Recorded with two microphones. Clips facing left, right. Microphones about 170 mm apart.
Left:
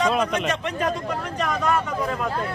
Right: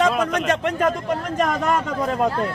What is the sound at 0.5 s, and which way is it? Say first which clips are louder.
Speech: right 5 dB; 50° right (ahead or behind).